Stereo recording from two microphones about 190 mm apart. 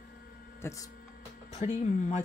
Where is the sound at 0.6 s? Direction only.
15° left (ahead or behind).